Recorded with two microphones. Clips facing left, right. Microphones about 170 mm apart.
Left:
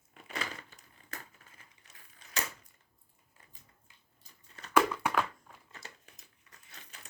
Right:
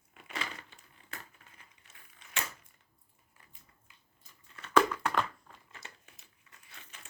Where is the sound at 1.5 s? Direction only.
40° left (ahead or behind).